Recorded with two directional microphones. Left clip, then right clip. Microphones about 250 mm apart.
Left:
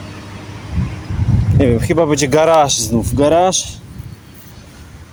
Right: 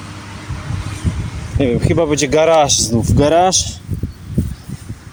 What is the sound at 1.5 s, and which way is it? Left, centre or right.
Speech, centre.